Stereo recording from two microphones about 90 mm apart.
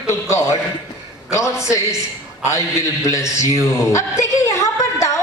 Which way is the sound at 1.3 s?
35° left (ahead or behind).